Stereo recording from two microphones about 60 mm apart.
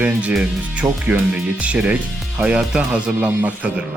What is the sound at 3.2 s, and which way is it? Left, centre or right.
Speech, right.